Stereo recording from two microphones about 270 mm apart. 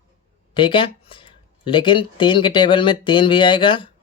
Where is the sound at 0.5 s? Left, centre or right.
Centre.